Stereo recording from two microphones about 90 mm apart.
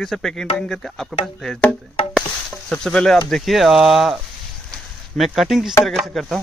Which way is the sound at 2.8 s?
10° left (ahead or behind).